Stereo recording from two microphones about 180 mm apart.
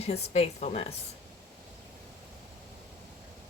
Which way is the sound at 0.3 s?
35° left (ahead or behind).